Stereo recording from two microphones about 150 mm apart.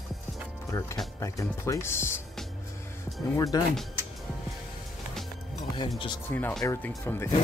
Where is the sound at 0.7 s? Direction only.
20° left (ahead or behind).